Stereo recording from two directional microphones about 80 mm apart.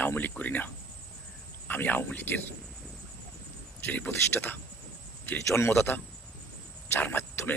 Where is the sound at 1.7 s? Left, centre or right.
Left.